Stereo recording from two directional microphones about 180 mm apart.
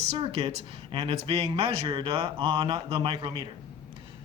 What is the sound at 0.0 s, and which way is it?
Speech, 35° right (ahead or behind).